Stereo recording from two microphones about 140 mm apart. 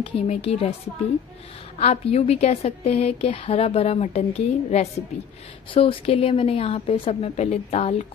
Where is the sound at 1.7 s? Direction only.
50° left (ahead or behind).